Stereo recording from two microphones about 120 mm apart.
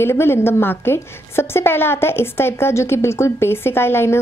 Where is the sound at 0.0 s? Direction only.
20° left (ahead or behind).